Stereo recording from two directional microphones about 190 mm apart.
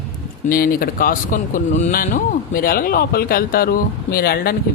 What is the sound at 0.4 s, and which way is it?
Speech, 50° left (ahead or behind).